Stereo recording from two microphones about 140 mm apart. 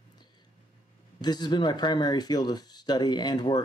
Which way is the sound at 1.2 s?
30° left (ahead or behind).